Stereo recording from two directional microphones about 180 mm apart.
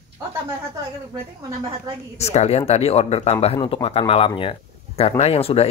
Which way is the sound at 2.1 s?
35° left (ahead or behind).